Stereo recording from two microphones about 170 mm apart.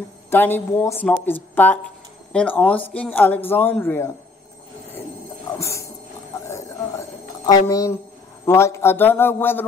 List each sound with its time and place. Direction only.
0.3 s speech: 10° left (ahead or behind)
5.6 s music: 15° left (ahead or behind)
6.4 s a sound: 15° left (ahead or behind)
8.5 s speech: 15° left (ahead or behind)